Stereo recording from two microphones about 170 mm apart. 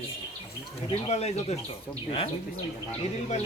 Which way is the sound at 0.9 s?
40° left (ahead or behind).